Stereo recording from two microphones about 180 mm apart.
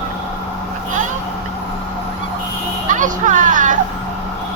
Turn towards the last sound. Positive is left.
turn(degrees=-45)  # may be behind; listen again after turning